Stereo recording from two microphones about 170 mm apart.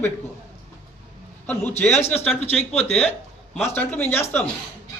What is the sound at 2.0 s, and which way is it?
Speech, 40° left (ahead or behind).